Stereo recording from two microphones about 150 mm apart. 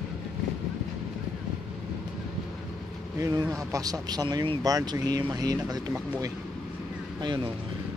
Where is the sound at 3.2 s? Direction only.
25° right (ahead or behind).